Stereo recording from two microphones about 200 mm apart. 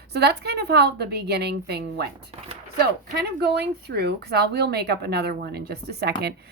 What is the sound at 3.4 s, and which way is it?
Speech, 55° right (ahead or behind).